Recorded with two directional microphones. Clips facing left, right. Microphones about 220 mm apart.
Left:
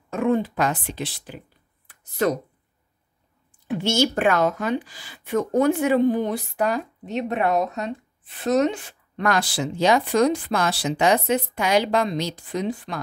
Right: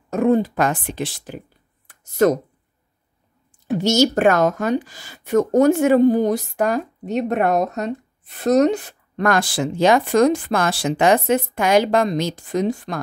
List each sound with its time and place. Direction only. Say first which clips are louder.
0.1 s a woman's voice: right 5 dB; 40° right (ahead or behind)
1.9 s a sound: right 6 dB; 45° right (ahead or behind)
3.6 s a woman's voice: right 5 dB; 40° right (ahead or behind)